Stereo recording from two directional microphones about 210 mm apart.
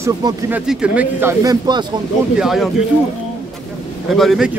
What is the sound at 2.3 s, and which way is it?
Speech, centre (ahead or behind).